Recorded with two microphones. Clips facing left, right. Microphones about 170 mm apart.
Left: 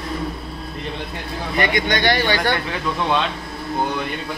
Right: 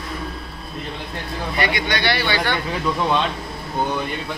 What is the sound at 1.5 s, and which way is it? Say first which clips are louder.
Speech: left 3 dB; 45° left (ahead or behind).